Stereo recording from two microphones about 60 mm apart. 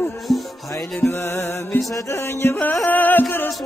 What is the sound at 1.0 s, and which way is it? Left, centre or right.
Music, left.